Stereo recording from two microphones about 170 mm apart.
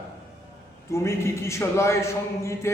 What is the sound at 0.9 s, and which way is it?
Speech, 15° left (ahead or behind).